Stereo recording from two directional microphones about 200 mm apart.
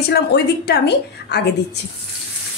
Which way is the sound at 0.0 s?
55° left (ahead or behind).